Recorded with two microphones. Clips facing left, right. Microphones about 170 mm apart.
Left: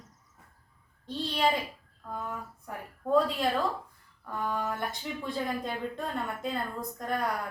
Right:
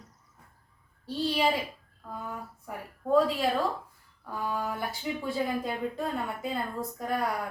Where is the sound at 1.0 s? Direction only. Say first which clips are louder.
Right 2 dB; 5° right (ahead or behind).